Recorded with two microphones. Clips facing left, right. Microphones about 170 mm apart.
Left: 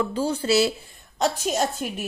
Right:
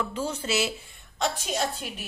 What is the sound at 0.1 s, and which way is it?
A woman's voice, 30° left (ahead or behind).